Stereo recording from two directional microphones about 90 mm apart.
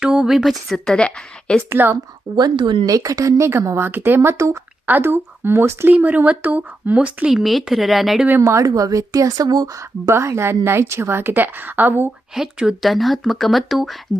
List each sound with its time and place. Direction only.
0.0 s speech: 10° right (ahead or behind); by 1.6 s 10° left (ahead or behind)
1.7 s a woman's voice: 25° right (ahead or behind)
2.3 s speech: 60° right (ahead or behind)
2.8 s speech: 40° right (ahead or behind); by 8.3 s centre (ahead or behind)
8.4 s speech: 35° right (ahead or behind)
10.1 s a woman's voice: 30° right (ahead or behind)
12.3 s speech: 5° right (ahead or behind)